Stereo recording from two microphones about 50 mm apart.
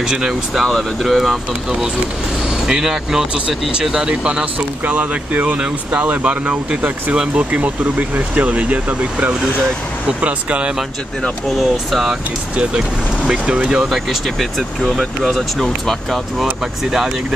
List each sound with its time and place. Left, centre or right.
0.0 s speech: centre
0.7 s speech: centre
2.6 s speech: centre
4.8 s speech: right
11.5 s speech: centre
12.5 s speech: centre
13.8 s speech: centre
14.8 s speech: centre